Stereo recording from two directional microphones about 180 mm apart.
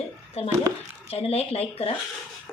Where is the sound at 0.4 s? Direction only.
35° left (ahead or behind).